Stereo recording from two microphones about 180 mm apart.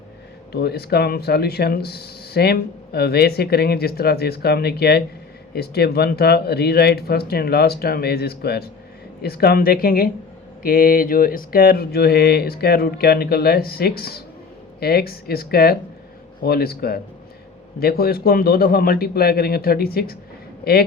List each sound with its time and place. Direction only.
0.5 s speech: 65° left (ahead or behind)